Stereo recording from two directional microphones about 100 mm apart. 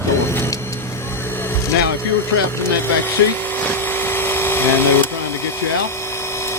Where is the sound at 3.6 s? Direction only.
20° left (ahead or behind).